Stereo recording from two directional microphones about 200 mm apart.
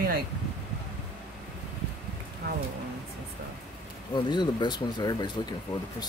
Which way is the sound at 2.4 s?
50° right (ahead or behind).